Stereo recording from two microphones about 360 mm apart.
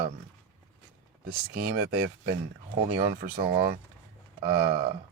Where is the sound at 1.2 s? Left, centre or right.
Right.